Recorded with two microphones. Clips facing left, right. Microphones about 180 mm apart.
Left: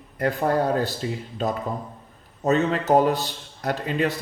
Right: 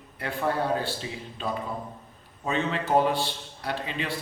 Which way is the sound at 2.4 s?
45° left (ahead or behind).